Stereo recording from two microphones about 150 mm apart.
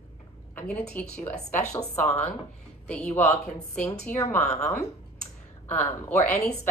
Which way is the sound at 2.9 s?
10° left (ahead or behind).